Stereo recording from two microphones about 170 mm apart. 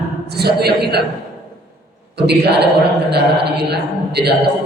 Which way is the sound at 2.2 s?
80° right.